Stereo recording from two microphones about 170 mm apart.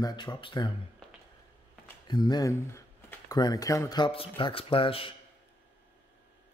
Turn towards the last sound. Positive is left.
turn(degrees=30)  # may be behind; listen again after turning